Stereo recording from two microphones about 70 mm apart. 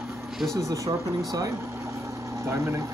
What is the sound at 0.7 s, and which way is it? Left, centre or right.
Speech, right.